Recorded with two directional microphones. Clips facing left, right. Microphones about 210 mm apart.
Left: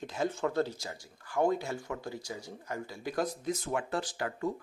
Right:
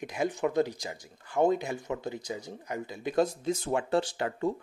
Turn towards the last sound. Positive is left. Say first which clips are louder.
# right 4 dB
turn(degrees=-25)  # may be behind; listen again after turning